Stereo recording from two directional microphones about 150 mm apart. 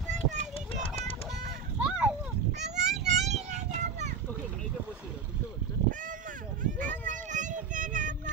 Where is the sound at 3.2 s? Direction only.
50° right (ahead or behind).